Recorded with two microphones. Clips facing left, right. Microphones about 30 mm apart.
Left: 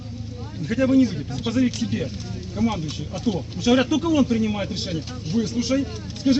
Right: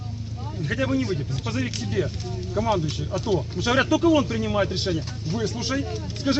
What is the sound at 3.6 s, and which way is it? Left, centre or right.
Speech, centre.